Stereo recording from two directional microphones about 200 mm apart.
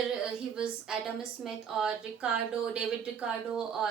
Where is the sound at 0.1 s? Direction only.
5° right (ahead or behind).